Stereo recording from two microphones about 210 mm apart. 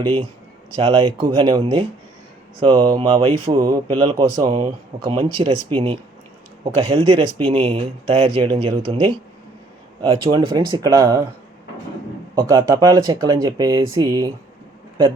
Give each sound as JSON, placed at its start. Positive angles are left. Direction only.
{"t": 0.8, "sound": "speech", "side_deg": -20}
{"t": 12.3, "sound": "speech", "side_deg": -15}